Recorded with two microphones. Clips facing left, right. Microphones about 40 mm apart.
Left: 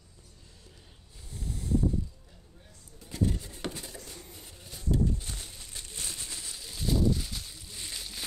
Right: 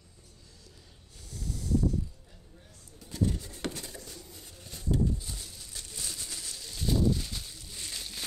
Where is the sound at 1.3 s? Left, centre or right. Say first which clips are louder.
Even; left.